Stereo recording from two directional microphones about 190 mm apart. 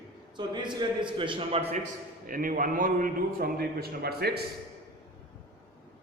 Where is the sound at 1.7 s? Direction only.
40° right (ahead or behind).